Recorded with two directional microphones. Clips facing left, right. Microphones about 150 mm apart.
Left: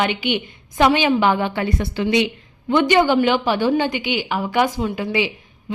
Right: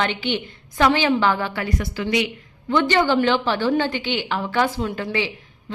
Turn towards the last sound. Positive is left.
turn(degrees=15)  # may be behind; listen again after turning